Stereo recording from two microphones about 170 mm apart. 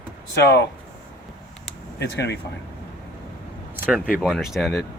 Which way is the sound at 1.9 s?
90° left.